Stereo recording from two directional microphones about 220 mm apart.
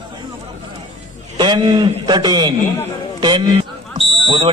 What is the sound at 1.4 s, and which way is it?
A man's voice, 20° right (ahead or behind).